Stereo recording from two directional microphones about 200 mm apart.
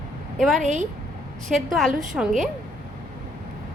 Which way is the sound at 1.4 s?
Centre (ahead or behind).